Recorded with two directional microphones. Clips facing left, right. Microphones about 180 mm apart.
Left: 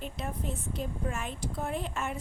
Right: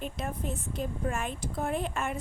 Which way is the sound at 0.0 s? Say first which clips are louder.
Right 2 dB; 50° right (ahead or behind).